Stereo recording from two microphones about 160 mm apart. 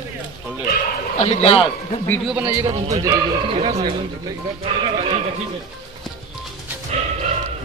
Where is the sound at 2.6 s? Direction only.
40° right (ahead or behind).